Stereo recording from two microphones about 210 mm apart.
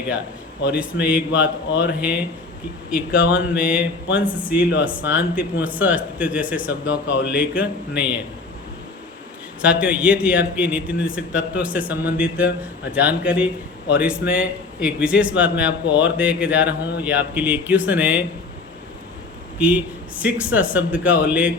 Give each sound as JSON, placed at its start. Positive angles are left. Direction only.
{"t": 1.0, "sound": "a man's voice", "side_deg": -5}
{"t": 1.7, "sound": "speech", "side_deg": 60}
{"t": 2.0, "sound": "a man's voice", "side_deg": -5}
{"t": 9.6, "sound": "a man's voice", "side_deg": -5}
{"t": 19.5, "sound": "a man's voice", "side_deg": -5}